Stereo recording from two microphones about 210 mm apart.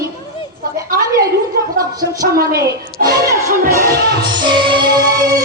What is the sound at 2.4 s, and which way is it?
Speech, 45° right (ahead or behind).